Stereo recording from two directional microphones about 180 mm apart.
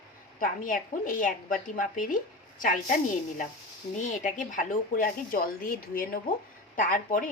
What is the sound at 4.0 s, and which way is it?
A woman's voice, 45° left (ahead or behind).